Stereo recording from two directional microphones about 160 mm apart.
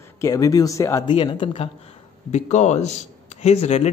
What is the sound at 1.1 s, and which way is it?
Speech, 30° left (ahead or behind).